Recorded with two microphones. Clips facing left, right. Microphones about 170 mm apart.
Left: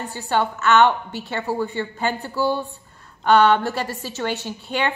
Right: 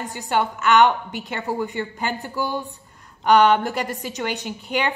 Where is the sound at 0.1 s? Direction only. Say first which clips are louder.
Left 1 dB; 15° right (ahead or behind).